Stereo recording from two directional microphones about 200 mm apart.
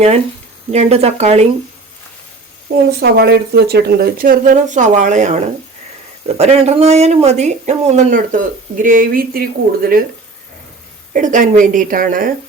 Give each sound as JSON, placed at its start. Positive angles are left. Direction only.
{"t": 0.7, "sound": "speech", "side_deg": -30}
{"t": 3.0, "sound": "speech", "side_deg": -55}
{"t": 11.1, "sound": "speech", "side_deg": -40}